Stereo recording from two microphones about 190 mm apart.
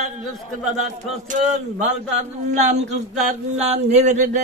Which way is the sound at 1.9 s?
35° right (ahead or behind).